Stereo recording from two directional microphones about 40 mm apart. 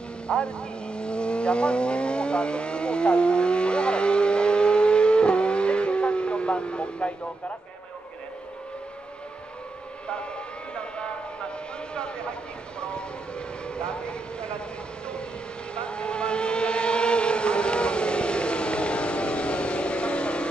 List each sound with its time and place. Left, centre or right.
0.3 s vehicle: left
10.7 s a sound: left
11.9 s vehicle: left
13.7 s vehicle: left
15.7 s vehicle: left